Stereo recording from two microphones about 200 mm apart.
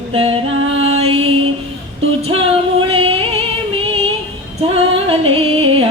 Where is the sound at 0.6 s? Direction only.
90° right.